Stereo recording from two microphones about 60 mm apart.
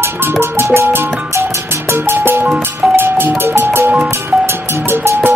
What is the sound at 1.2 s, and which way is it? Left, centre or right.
Music, right.